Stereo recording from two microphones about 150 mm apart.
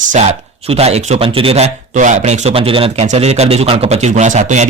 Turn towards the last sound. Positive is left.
turn(degrees=-50)  # may be behind; listen again after turning